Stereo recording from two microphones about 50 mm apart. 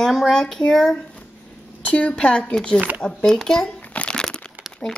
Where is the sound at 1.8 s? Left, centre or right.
Left.